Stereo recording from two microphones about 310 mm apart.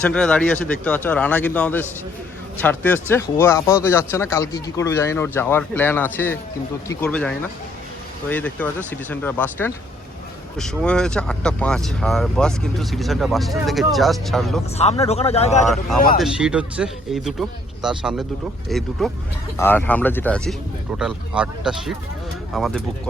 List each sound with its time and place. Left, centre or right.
0.0 s speech: centre
14.8 s speech: centre
16.1 s speech: centre